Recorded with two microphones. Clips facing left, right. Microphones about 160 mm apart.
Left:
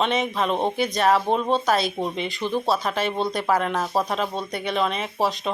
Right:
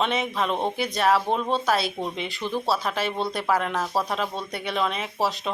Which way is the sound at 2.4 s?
20° left (ahead or behind).